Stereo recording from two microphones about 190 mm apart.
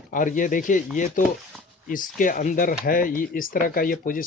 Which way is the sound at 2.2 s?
45° left (ahead or behind).